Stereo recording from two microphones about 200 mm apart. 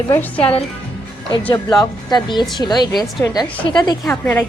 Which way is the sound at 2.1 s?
20° left (ahead or behind).